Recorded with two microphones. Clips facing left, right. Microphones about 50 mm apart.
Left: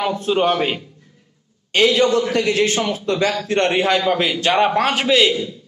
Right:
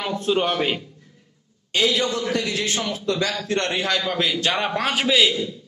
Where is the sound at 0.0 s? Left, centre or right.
Centre.